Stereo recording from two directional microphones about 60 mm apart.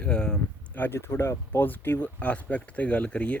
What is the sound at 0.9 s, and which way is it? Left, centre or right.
Speech, left.